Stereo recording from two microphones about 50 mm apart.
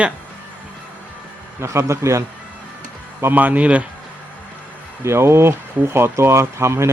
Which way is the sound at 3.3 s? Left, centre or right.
Right.